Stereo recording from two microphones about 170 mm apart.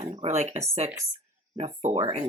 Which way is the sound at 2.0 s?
30° right (ahead or behind).